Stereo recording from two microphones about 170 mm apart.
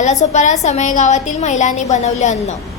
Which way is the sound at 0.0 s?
45° left (ahead or behind).